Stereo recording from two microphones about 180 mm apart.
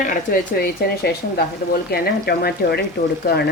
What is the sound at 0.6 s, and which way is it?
Speech, 60° left (ahead or behind).